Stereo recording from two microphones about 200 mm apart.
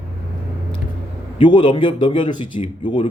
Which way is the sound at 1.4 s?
25° left (ahead or behind).